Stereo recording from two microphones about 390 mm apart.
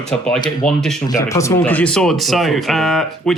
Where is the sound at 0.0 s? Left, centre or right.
Centre.